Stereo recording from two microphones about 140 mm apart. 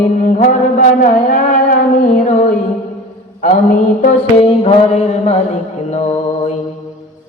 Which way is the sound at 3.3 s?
65° left (ahead or behind).